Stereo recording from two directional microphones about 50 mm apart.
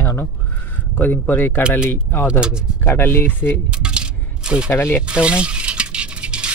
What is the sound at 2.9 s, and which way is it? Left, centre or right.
Speech, left.